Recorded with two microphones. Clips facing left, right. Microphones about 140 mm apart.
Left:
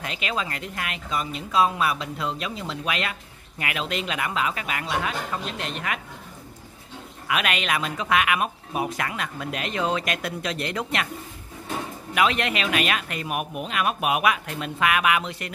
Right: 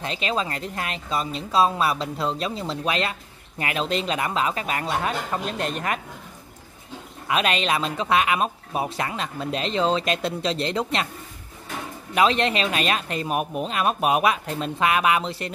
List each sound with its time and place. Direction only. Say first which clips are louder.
0.0 s a woman's voice: right 3 dB; 30° right (ahead or behind)
7.2 s speech: right 3 dB; 30° right (ahead or behind)
12.1 s a woman's voice: right 3 dB; 30° right (ahead or behind)